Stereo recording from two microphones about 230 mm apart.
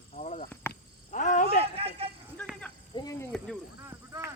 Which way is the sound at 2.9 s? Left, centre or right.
Centre.